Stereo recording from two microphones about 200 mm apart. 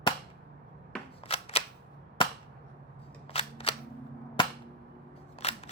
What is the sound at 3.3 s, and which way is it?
Single-lens reflex camera, 30° left (ahead or behind).